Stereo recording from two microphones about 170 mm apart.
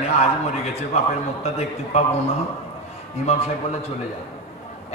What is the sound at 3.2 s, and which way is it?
Speech, 35° left (ahead or behind).